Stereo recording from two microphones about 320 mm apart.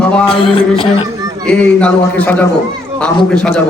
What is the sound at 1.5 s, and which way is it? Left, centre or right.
A man's voice, centre.